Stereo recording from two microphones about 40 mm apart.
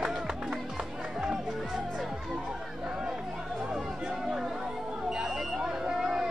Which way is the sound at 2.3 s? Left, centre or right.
Centre.